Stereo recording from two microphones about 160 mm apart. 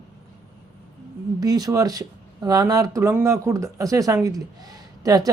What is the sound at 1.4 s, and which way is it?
Speech, 25° right (ahead or behind).